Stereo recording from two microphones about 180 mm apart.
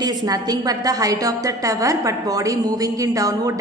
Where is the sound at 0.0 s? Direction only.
20° right (ahead or behind).